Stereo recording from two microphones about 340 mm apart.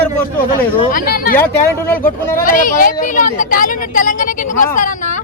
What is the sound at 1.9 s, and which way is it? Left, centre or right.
Speech, centre.